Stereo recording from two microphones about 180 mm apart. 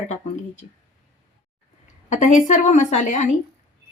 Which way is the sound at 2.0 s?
45° left (ahead or behind).